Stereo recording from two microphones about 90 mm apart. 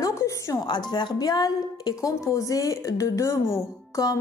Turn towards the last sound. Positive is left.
turn(degrees=40)  # may be behind; listen again after turning